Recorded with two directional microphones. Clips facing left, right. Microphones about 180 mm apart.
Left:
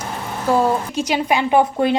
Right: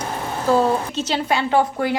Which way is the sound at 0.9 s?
15° left (ahead or behind).